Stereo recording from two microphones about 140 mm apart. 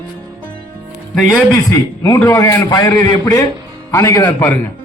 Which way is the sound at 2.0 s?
25° left (ahead or behind).